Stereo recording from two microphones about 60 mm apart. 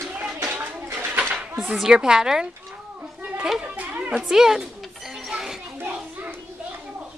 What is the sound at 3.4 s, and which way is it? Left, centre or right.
A child's voice, centre.